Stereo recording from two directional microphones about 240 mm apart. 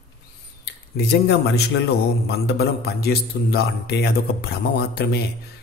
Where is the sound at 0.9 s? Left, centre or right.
Left.